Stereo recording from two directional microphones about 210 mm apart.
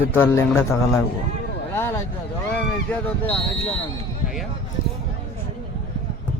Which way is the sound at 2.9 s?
5° left (ahead or behind).